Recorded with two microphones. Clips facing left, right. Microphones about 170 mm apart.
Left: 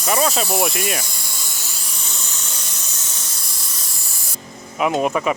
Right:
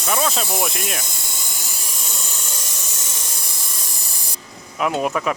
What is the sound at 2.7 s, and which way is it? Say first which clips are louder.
Steam: right 2 dB; 15° right (ahead or behind).